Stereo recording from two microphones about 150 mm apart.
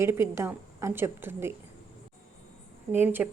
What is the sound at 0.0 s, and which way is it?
Speech, 15° right (ahead or behind).